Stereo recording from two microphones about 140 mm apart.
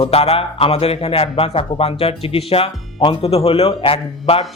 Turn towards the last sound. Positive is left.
turn(degrees=40)  # may be behind; listen again after turning